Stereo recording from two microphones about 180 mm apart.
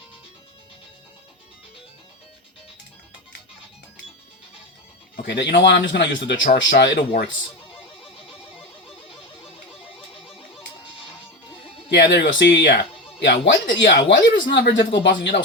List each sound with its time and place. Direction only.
5.1 s speech: 65° left (ahead or behind)
11.9 s speech: 70° left (ahead or behind)